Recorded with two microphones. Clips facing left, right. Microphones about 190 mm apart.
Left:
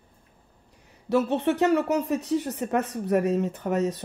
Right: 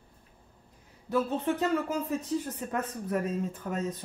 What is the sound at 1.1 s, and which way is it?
Speech, 75° left (ahead or behind).